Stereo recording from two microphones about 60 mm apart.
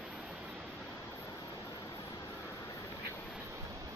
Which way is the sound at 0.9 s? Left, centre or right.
Left.